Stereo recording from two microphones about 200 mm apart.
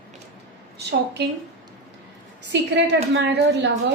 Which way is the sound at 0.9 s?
55° right (ahead or behind).